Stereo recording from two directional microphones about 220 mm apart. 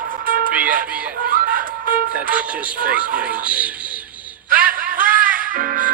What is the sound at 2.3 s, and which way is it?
Speech, 5° right (ahead or behind).